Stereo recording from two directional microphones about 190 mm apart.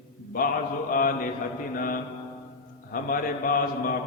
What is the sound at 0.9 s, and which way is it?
A man's voice, 45° left (ahead or behind).